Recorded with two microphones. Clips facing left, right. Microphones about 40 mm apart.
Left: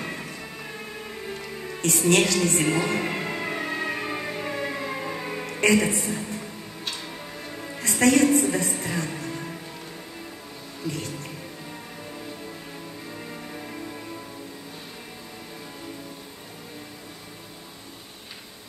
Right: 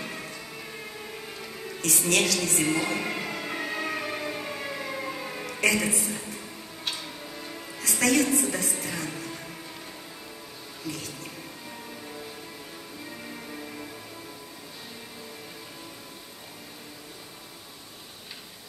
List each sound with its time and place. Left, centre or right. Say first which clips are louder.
1.8 s speech: left 5 dB; left
2.9 s music: left 3 dB; left
5.5 s speech: left 4 dB; left
7.8 s music: left 5 dB; left